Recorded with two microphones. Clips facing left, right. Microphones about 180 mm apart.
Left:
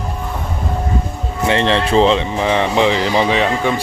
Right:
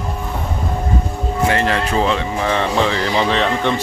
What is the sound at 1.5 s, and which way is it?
Speech, 25° left (ahead or behind).